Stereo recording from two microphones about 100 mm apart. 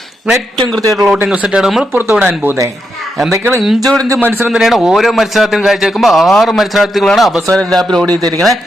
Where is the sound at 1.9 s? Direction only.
20° right (ahead or behind).